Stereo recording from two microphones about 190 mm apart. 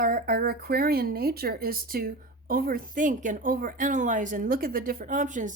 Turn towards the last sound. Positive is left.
turn(degrees=-40)  # may be behind; listen again after turning